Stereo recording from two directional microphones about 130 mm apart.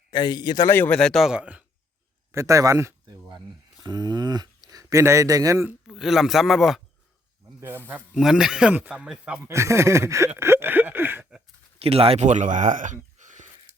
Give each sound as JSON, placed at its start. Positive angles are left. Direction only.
{"t": 0.1, "sound": "a man's voice", "side_deg": 35}
{"t": 0.7, "sound": "speech", "side_deg": 10}
{"t": 2.3, "sound": "speech", "side_deg": -25}
{"t": 5.9, "sound": "speech", "side_deg": -5}
{"t": 7.4, "sound": "snake", "side_deg": -20}
{"t": 8.1, "sound": "speech", "side_deg": -5}
{"t": 9.5, "sound": "a sound", "side_deg": -20}
{"t": 11.8, "sound": "speech", "side_deg": -45}